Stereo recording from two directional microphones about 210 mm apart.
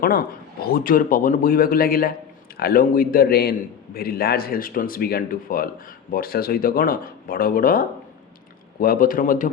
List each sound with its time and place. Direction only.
0.0 s speech: 45° left (ahead or behind)
8.8 s speech: 40° left (ahead or behind)